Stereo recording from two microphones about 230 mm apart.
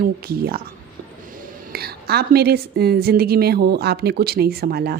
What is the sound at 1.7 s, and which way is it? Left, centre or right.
A woman's voice, right.